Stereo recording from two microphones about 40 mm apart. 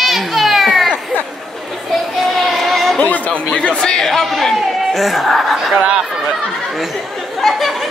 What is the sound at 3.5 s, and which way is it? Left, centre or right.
Speech, left.